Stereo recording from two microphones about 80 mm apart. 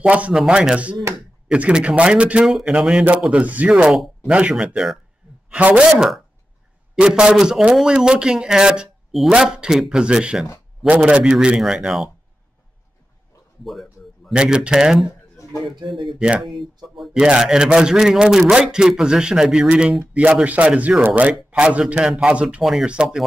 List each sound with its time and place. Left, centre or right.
0.0 s speech: centre
13.7 s a sound: centre
14.3 s speech: centre
16.2 s speech: centre
16.4 s speech: centre
22.6 s speech: centre
22.8 s speech: centre